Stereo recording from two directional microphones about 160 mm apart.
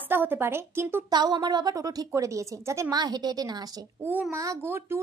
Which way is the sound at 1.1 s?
25° right (ahead or behind).